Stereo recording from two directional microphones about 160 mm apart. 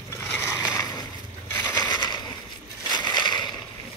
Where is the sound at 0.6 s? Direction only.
25° left (ahead or behind).